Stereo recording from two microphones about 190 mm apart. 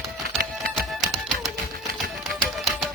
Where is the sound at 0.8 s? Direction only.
Centre (ahead or behind).